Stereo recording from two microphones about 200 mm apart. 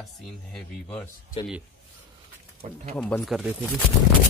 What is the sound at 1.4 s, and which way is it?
Speech, 25° left (ahead or behind).